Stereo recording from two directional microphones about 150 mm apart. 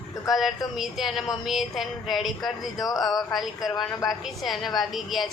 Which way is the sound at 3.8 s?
Centre (ahead or behind).